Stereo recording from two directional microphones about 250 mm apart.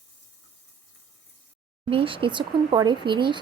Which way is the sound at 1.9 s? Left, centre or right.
Right.